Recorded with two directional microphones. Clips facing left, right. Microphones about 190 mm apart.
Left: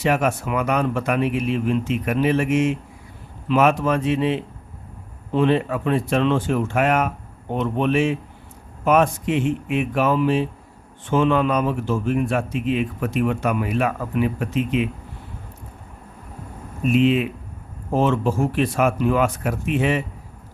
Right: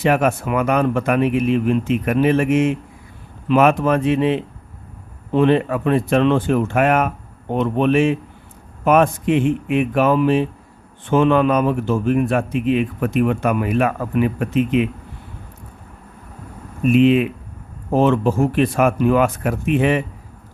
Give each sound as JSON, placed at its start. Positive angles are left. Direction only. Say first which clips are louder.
{"t": 0.0, "sound": "a man's voice", "louder": "right 3 dB", "side_deg": -55}
{"t": 16.8, "sound": "a man's voice", "louder": "right 4 dB", "side_deg": -60}